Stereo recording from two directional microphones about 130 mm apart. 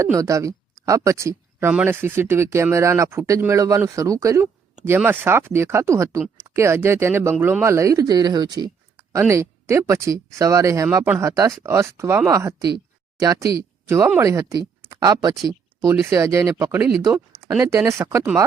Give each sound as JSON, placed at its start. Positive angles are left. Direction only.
{"t": 0.0, "sound": "speech", "side_deg": -25}